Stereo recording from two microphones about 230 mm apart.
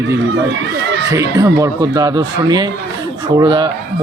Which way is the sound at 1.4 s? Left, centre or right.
Centre.